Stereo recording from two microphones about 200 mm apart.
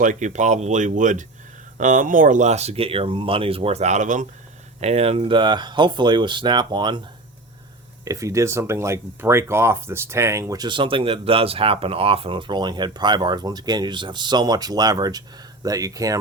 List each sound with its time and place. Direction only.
0.0 s speech: 40° right (ahead or behind); by 7.0 s 25° right (ahead or behind)
8.0 s speech: 15° right (ahead or behind)